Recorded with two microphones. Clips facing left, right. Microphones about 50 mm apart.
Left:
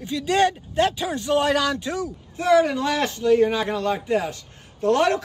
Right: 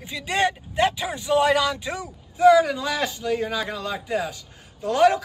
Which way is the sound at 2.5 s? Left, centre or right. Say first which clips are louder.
Left 3 dB; left.